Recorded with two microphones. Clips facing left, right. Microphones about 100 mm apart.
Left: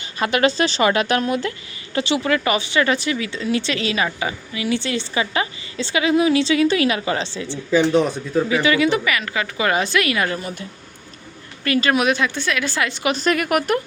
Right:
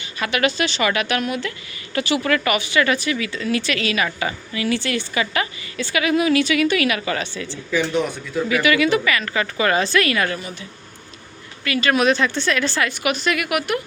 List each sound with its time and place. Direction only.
0.0 s speech: 40° left (ahead or behind)
1.9 s a woman's voice: 25° left (ahead or behind)
11.6 s speech: 35° left (ahead or behind)
11.9 s a woman's voice: 15° left (ahead or behind); by 13.7 s 40° left (ahead or behind)